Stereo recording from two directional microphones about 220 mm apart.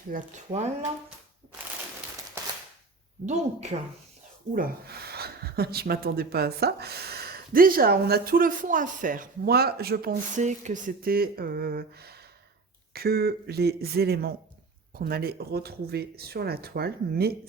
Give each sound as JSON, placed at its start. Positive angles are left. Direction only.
{"t": 0.1, "sound": "speech", "side_deg": -35}
{"t": 3.2, "sound": "speech", "side_deg": -30}
{"t": 4.5, "sound": "speech", "side_deg": -45}